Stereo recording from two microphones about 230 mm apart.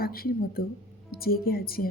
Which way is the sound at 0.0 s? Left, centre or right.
Left.